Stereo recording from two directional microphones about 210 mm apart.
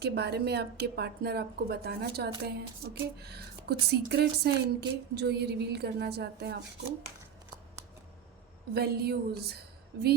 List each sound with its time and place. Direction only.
0.0 s a woman's voice: 50° right (ahead or behind)
8.7 s a woman's voice: 50° right (ahead or behind)